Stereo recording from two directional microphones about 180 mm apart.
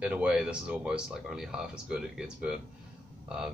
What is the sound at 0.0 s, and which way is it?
Speech, 5° right (ahead or behind).